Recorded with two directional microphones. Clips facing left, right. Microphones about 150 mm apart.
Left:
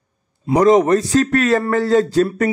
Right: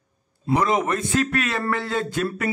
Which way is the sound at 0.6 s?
40° left (ahead or behind).